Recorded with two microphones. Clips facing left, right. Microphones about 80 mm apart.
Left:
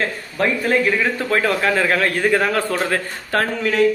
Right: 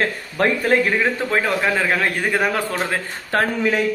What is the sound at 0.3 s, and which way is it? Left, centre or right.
Speech, right.